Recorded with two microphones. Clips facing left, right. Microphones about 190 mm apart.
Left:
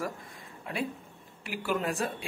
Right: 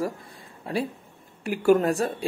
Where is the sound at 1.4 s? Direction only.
45° right (ahead or behind).